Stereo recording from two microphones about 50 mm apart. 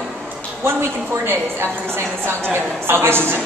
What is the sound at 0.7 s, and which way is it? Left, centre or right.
Speech, right.